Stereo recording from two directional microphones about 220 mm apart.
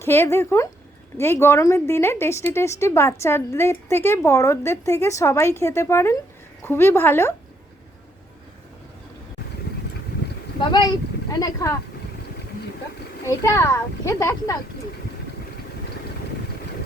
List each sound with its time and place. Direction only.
0.0 s a woman's voice: 10° left (ahead or behind)
10.6 s speech: 20° left (ahead or behind)
13.2 s a woman's voice: 10° left (ahead or behind)